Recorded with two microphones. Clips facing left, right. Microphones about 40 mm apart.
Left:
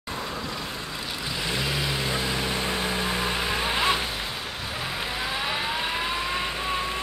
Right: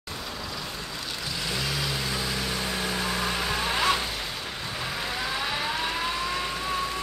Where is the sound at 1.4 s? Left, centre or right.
Left.